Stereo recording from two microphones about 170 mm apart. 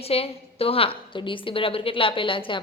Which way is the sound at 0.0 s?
35° left (ahead or behind).